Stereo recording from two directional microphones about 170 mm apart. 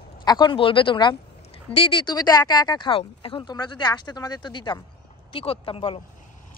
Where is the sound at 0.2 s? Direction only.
25° left (ahead or behind).